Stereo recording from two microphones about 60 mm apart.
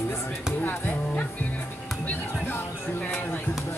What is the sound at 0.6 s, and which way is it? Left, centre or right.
Music, left.